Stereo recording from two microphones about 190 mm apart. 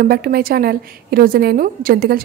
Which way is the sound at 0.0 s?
50° right (ahead or behind).